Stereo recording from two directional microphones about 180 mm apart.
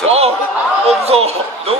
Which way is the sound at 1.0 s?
35° right (ahead or behind).